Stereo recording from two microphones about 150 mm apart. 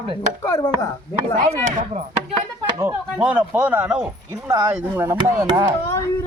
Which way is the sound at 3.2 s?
10° right (ahead or behind).